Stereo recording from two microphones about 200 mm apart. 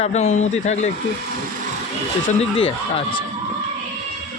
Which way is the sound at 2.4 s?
30° left (ahead or behind).